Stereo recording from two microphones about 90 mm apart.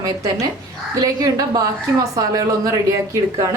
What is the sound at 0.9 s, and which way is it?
A woman's voice, 40° right (ahead or behind).